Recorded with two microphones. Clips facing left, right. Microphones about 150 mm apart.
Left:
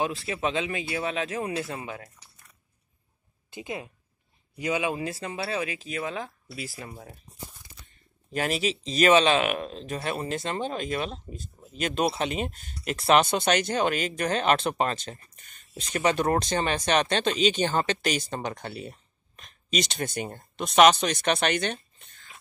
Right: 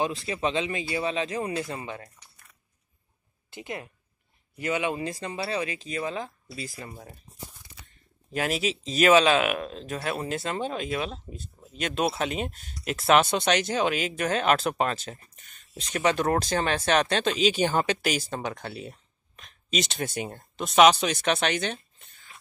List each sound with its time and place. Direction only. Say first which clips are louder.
0.0 s speech: right 1 dB; centre (ahead or behind)
3.4 s speech: left 1 dB; 20° left (ahead or behind); by 22.1 s centre (ahead or behind)